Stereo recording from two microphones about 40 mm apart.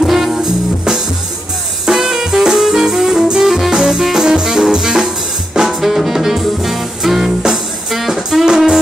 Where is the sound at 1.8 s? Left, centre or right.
Centre.